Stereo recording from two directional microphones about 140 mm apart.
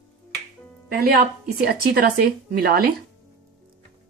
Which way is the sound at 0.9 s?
90° right.